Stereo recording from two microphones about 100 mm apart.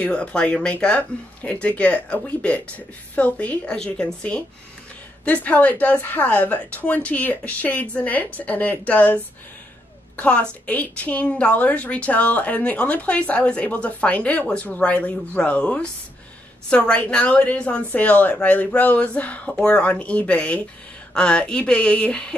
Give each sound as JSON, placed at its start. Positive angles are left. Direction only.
{"t": 0.0, "sound": "a woman's voice", "side_deg": 10}